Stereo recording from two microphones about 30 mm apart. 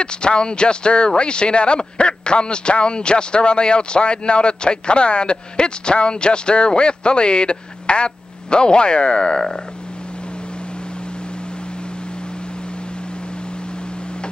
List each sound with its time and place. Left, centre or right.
0.0 s speech: left